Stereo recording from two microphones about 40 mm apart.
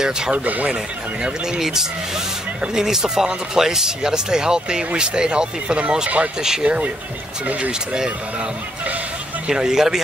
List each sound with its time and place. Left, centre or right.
0.3 s speech: right
1.6 s speech: centre; by 6.9 s right
9.5 s speech: centre